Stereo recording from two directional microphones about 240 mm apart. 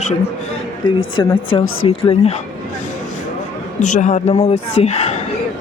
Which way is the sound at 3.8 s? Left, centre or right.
Left.